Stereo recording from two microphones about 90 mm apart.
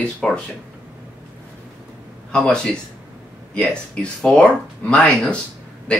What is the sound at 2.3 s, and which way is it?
Speech, 10° left (ahead or behind).